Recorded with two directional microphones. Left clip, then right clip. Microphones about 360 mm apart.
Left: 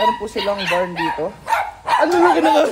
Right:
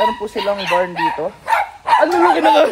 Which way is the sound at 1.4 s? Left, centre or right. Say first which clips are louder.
Right 4 dB; right.